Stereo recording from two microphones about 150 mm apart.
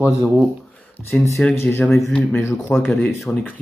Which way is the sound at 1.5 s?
15° left (ahead or behind).